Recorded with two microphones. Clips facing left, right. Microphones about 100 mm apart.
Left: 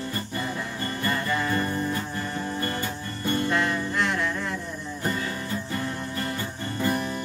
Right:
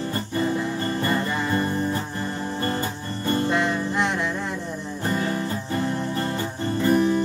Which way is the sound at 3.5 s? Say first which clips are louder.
Right 2 dB; 20° right (ahead or behind).